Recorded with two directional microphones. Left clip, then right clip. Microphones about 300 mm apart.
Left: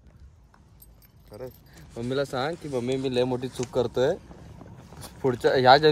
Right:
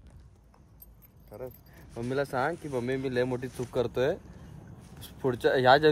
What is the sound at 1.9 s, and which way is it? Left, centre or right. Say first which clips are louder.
Speech: left 3 dB; centre.